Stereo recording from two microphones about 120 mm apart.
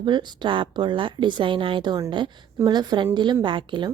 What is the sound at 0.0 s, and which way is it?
Speech, 40° right (ahead or behind).